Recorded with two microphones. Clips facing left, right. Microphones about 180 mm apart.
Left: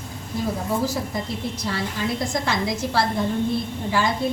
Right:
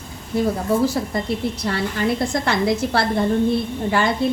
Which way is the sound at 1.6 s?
60° right (ahead or behind).